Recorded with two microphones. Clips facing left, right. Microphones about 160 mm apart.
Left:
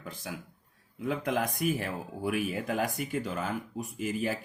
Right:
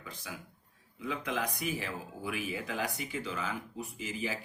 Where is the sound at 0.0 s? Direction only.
50° left (ahead or behind).